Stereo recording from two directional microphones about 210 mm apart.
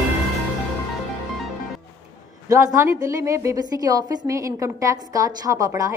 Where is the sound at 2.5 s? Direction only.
15° right (ahead or behind).